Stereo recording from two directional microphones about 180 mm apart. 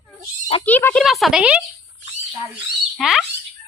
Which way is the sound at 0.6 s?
10° left (ahead or behind).